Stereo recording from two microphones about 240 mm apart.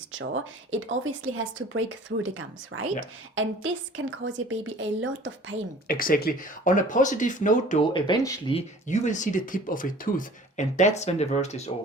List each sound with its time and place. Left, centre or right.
1.2 s a woman's voice: right
5.9 s speech: left
7.9 s speech: centre